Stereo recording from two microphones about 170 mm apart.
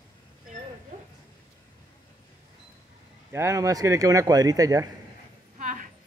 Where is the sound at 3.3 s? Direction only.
20° right (ahead or behind).